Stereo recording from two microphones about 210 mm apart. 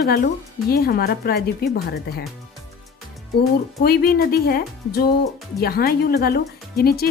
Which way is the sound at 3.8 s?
45° left (ahead or behind).